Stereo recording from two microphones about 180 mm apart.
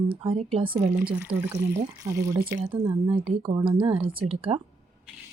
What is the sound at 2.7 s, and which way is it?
Speech, 30° right (ahead or behind).